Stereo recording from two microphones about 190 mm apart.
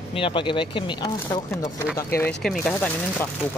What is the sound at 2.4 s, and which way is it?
Speech, 5° left (ahead or behind).